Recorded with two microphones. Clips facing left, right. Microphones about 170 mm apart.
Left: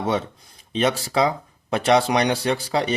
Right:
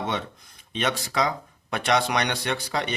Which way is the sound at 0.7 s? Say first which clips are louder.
Left 6 dB; 35° left (ahead or behind).